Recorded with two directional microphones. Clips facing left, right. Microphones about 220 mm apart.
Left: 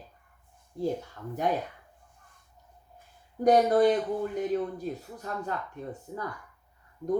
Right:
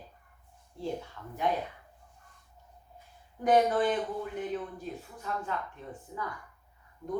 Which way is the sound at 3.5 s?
40° left (ahead or behind).